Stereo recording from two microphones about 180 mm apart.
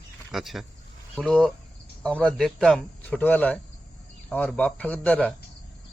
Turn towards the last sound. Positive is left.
turn(degrees=5)  # may be behind; listen again after turning